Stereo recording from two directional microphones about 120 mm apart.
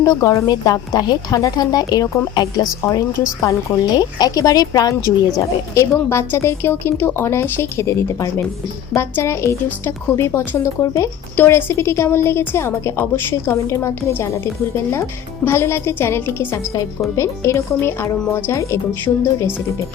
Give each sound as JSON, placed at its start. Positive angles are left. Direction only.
{"t": 0.0, "sound": "speech", "side_deg": 30}
{"t": 15.4, "sound": "speech", "side_deg": 20}